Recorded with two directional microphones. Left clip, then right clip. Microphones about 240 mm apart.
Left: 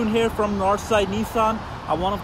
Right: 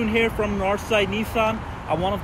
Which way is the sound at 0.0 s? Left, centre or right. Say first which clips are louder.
Left 1 dB; left.